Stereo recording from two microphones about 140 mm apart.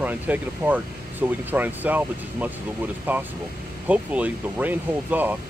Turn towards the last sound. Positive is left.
turn(degrees=-15)  # may be behind; listen again after turning